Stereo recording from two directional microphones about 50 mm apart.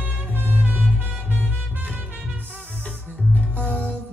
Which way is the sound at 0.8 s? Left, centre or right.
Left.